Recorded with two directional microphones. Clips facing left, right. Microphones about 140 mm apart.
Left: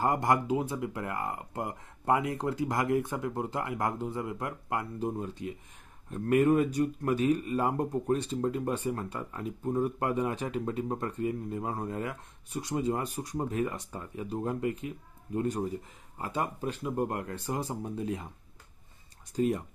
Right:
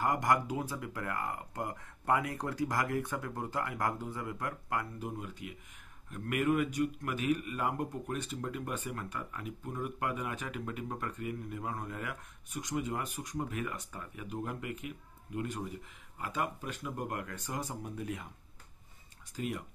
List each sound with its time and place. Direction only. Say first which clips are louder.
0.0 s speech: left 3 dB; 25° left (ahead or behind)
19.3 s speech: left 9 dB; 35° left (ahead or behind)